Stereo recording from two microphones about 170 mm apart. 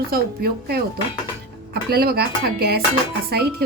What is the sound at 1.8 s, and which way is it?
Speech, 65° right (ahead or behind).